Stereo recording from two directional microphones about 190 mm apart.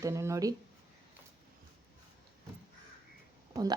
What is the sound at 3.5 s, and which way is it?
Speech, 20° right (ahead or behind).